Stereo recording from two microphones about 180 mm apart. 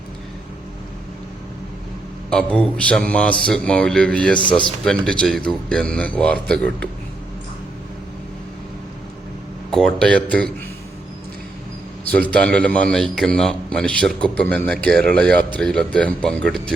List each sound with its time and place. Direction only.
2.3 s speech: 5° left (ahead or behind)
4.4 s speech: 25° left (ahead or behind)
4.9 s a man's voice: 5° left (ahead or behind)
9.6 s a man's voice: 5° left (ahead or behind)
12.1 s a man's voice: 10° left (ahead or behind)